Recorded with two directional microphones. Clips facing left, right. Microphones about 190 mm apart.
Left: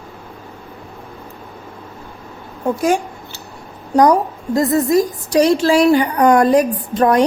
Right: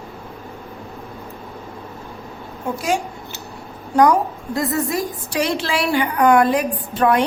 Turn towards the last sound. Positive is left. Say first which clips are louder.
# left 3 dB
turn(degrees=40)  # may be behind; listen again after turning